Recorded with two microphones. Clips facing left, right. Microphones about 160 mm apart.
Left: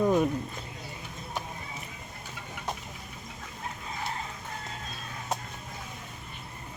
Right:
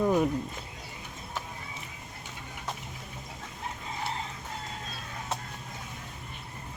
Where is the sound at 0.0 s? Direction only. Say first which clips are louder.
Left 1 dB; 10° right (ahead or behind).